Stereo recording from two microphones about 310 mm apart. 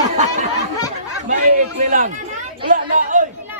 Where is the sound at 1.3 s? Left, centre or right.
Right.